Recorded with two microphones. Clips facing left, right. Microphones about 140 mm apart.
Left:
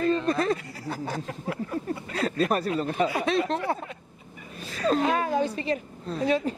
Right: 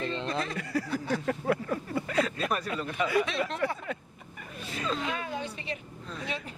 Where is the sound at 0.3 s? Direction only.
45° left (ahead or behind).